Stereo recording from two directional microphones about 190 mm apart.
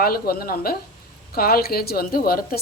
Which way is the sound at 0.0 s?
55° left (ahead or behind).